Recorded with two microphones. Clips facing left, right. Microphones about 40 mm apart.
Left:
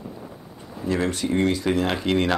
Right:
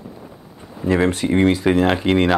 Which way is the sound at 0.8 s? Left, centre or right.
Right.